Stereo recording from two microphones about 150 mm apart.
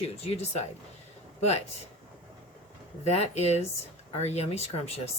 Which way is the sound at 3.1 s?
45° left (ahead or behind).